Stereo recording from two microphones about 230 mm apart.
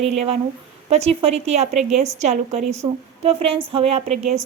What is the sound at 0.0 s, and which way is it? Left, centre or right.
A woman's voice, right.